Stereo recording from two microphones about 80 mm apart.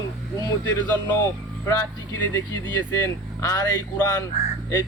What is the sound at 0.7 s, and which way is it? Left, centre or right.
Speech, left.